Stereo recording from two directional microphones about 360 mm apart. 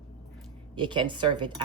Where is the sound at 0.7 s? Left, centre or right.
Centre.